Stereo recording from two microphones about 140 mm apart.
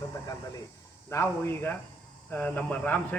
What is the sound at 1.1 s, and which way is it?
Speech, 20° left (ahead or behind).